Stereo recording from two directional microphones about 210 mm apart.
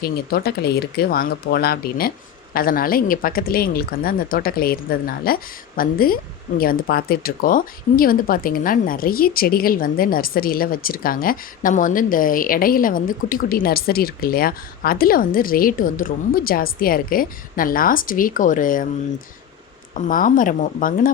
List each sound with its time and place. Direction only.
0.0 s speech: 45° left (ahead or behind)
19.9 s speech: 40° left (ahead or behind)